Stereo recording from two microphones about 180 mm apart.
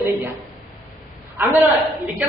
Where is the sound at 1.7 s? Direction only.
Centre (ahead or behind).